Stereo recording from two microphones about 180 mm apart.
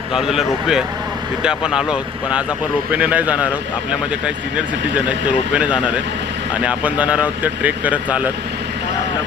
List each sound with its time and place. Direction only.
0.1 s speech: centre (ahead or behind)
4.5 s speech: 5° right (ahead or behind)